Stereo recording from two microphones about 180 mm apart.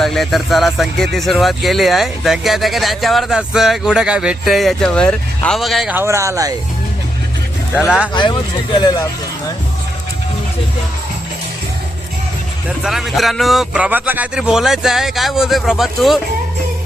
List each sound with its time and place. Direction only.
0.0 s a man's voice: centre (ahead or behind)
6.0 s speech: 15° right (ahead or behind)
7.9 s a man's voice: 5° right (ahead or behind)
8.1 s speech: 25° left (ahead or behind)
12.6 s a man's voice: centre (ahead or behind)